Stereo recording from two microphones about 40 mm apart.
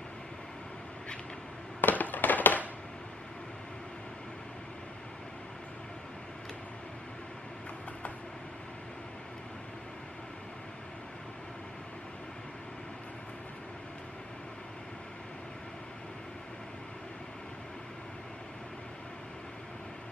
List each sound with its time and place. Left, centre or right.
1.8 s fireworks: left